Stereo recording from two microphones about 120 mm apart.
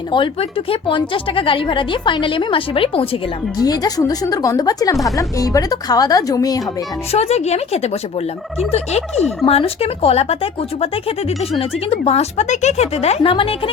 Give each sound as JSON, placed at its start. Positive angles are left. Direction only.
{"t": 0.1, "sound": "speech", "side_deg": 45}
{"t": 3.6, "sound": "a woman's voice", "side_deg": 30}
{"t": 7.1, "sound": "speech", "side_deg": 65}
{"t": 12.0, "sound": "speech", "side_deg": 70}
{"t": 13.3, "sound": "speech", "side_deg": 50}